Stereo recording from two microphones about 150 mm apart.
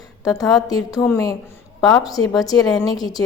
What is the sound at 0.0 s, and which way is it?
A woman's voice, 25° left (ahead or behind).